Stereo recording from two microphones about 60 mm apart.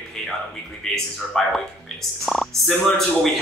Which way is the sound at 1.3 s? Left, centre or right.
Centre.